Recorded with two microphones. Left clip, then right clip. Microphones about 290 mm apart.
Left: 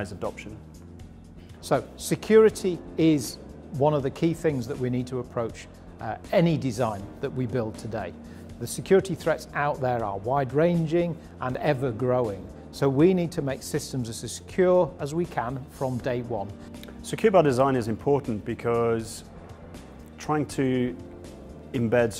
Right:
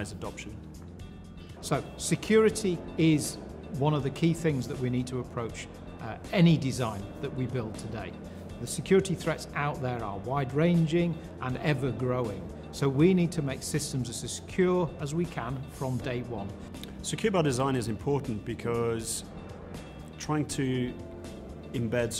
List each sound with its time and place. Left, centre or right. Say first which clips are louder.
1.7 s speech: left 6 dB; left
6.0 s speech: left 5 dB; left
7.2 s speech: left 6 dB; left
17.0 s speech: left 8 dB; left
20.2 s speech: left 5 dB; left